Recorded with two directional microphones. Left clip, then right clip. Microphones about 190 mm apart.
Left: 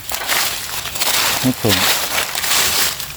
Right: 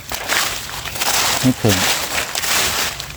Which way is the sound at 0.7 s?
30° left (ahead or behind).